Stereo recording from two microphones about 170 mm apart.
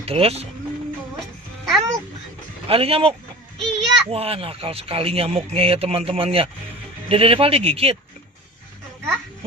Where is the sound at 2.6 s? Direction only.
35° right (ahead or behind).